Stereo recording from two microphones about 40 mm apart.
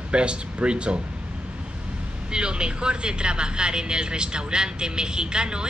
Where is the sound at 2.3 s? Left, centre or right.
Right.